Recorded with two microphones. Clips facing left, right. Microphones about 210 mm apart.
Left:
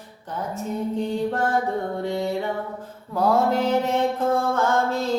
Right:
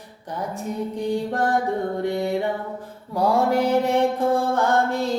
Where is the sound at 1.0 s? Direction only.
15° right (ahead or behind).